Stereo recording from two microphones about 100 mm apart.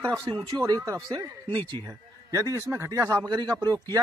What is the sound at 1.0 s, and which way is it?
Speech, 50° right (ahead or behind).